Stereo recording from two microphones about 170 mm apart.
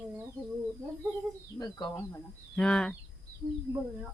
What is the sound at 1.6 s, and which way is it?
Speech, 25° left (ahead or behind).